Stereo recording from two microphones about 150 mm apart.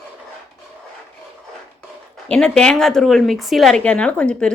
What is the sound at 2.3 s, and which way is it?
Speech, 5° left (ahead or behind).